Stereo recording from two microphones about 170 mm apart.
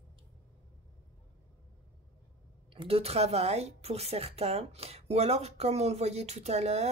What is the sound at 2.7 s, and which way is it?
Speech, 35° right (ahead or behind).